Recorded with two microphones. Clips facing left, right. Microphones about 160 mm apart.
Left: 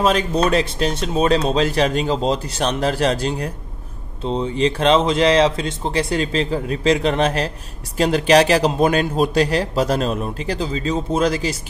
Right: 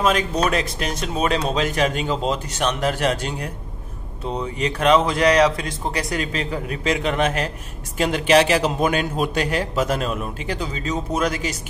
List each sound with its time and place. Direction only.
0.0 s a man's voice: 30° left (ahead or behind)